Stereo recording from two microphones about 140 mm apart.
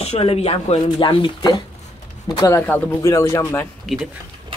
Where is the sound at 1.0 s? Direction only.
35° left (ahead or behind).